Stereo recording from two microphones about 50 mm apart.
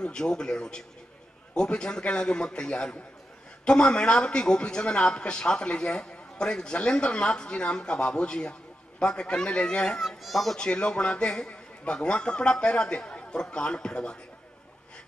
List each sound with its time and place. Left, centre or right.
0.0 s a man's voice: centre
10.0 s a child's voice: centre
10.6 s speech: centre